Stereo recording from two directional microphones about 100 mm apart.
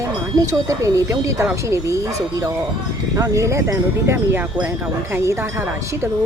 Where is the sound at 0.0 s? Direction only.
35° right (ahead or behind).